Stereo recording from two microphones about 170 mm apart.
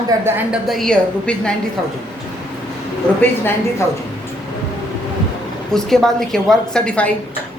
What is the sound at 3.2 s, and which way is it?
Speech, 15° left (ahead or behind).